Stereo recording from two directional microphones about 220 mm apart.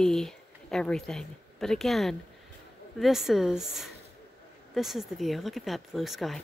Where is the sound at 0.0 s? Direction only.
Centre (ahead or behind).